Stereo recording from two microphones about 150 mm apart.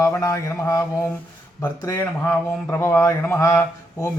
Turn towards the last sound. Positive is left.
turn(degrees=20)  # may be behind; listen again after turning